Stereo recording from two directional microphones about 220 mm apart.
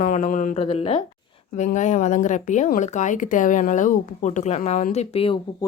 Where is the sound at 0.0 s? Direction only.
40° left (ahead or behind).